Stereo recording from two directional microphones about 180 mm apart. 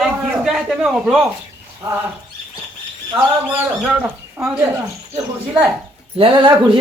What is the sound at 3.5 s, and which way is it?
Speech, 10° right (ahead or behind).